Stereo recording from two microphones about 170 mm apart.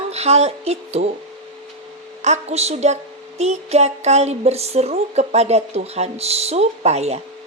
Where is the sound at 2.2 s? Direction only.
40° right (ahead or behind).